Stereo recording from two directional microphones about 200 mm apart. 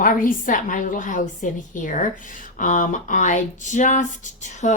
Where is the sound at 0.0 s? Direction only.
40° left (ahead or behind).